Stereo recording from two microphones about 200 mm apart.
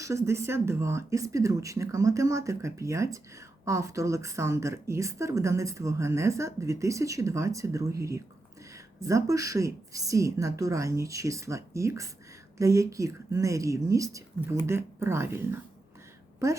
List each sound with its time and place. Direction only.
0.0 s a woman's voice: 15° right (ahead or behind)